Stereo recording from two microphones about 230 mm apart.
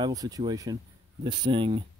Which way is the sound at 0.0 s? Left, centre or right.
Centre.